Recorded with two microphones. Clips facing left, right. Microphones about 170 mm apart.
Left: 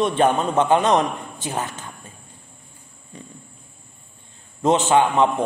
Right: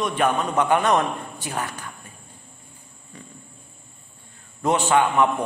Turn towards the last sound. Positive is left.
turn(degrees=20)  # may be behind; listen again after turning